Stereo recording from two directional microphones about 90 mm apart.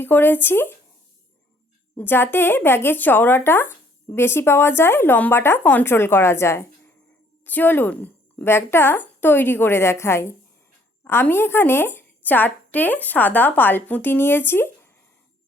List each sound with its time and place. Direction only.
0.0 s speech: 20° left (ahead or behind)
2.0 s speech: 25° left (ahead or behind)